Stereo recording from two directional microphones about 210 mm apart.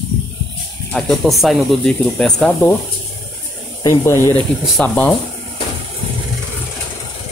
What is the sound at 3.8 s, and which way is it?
Speech, 15° left (ahead or behind).